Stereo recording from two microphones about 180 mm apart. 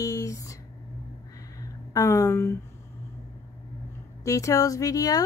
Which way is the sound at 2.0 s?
15° left (ahead or behind).